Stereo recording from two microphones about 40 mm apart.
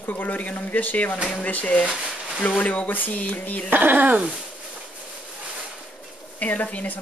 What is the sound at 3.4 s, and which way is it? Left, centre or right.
Speech, left.